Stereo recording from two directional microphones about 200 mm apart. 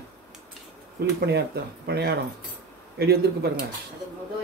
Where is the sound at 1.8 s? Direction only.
55° right (ahead or behind).